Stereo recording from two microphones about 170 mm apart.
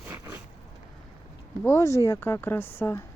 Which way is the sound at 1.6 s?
15° left (ahead or behind).